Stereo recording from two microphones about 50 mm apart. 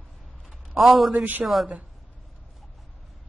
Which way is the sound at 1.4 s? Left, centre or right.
Right.